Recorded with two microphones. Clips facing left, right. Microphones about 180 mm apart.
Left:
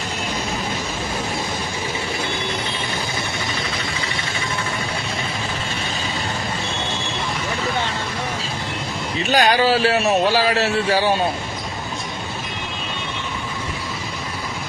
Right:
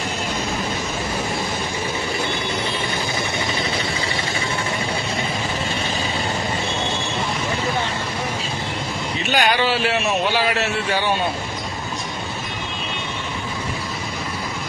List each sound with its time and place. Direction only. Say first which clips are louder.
9.1 s a man's voice: left 3 dB; 35° left (ahead or behind)